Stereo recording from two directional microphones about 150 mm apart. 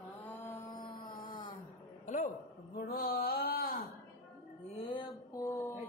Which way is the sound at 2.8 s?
80° left.